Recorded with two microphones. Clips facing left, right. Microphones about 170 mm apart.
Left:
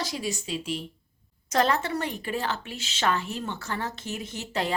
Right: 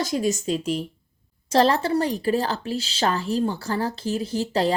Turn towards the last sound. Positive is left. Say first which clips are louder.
# right 8 dB
turn(degrees=-35)  # may be behind; listen again after turning